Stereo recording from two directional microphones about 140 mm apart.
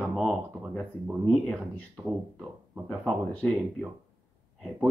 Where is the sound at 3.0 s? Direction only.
5° left (ahead or behind).